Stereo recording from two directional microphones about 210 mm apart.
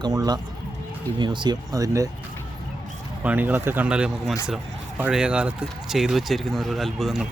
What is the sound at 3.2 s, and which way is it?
Speech, 10° right (ahead or behind).